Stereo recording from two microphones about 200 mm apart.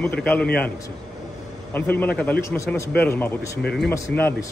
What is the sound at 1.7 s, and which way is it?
A man's voice, 10° left (ahead or behind).